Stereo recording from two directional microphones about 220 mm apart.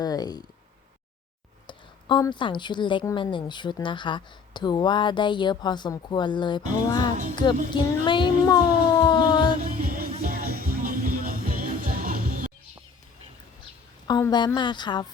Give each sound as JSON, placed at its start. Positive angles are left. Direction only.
{"t": 0.0, "sound": "speech", "side_deg": 15}
{"t": 1.6, "sound": "a woman's voice", "side_deg": 20}
{"t": 9.6, "sound": "music", "side_deg": -40}
{"t": 14.1, "sound": "a woman's voice", "side_deg": 20}